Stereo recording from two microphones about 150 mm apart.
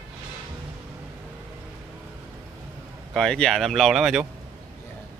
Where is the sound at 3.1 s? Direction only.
5° left (ahead or behind).